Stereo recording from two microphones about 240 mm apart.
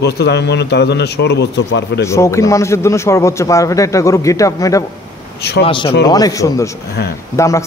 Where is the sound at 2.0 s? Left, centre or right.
Centre.